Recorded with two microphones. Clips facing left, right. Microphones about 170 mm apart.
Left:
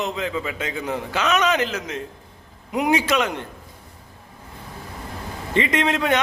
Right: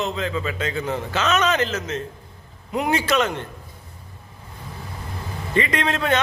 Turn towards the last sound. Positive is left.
turn(degrees=15)  # may be behind; listen again after turning